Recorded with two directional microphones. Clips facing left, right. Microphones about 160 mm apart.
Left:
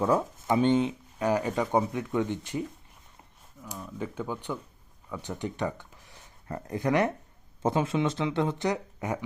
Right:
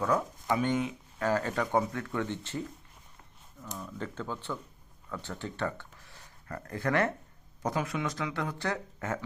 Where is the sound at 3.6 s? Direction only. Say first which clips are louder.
Left 2 dB; 10° left (ahead or behind).